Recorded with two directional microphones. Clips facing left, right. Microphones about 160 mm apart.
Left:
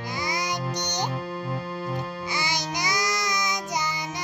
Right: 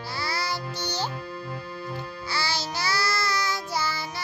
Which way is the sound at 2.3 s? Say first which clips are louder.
Right 1 dB; 15° left (ahead or behind).